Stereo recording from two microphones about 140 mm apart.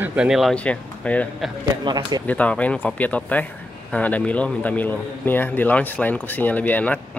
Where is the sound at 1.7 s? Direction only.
30° right (ahead or behind).